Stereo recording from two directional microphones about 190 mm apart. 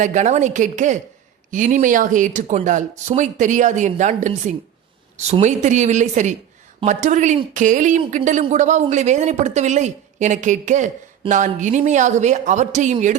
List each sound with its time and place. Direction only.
0.0 s speech: 40° right (ahead or behind)